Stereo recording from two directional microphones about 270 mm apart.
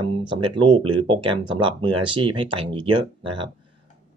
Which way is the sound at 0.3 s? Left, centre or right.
Centre.